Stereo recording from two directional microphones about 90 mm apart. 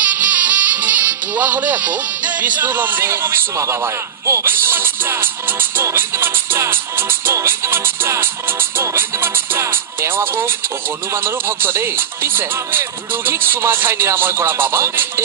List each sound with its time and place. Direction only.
0.0 s speech: 20° right (ahead or behind)